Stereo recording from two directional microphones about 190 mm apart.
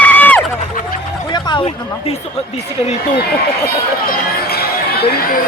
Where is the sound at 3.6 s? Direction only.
55° left (ahead or behind).